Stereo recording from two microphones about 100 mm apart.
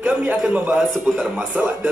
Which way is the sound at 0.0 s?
15° right (ahead or behind).